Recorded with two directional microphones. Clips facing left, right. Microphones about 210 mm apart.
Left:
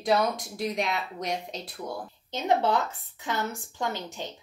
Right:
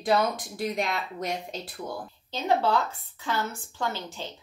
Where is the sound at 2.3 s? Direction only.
20° left (ahead or behind).